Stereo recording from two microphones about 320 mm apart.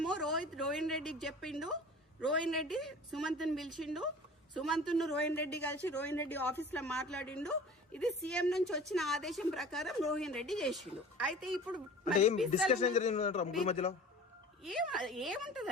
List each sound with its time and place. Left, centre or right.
0.0 s a woman's voice: centre
12.6 s speech: left
14.6 s a man's voice: centre